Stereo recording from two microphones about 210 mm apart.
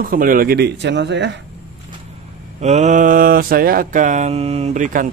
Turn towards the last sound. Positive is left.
turn(degrees=-35)  # may be behind; listen again after turning